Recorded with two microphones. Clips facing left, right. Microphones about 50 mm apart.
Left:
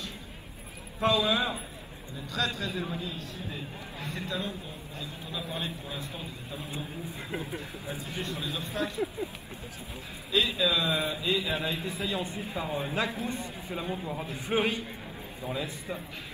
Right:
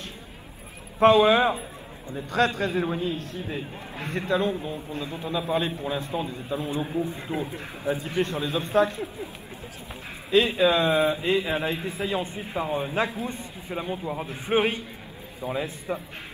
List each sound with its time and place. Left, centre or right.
0.9 s a man's voice: right
6.2 s a man's voice: right
7.3 s a man's voice: right
10.3 s a man's voice: right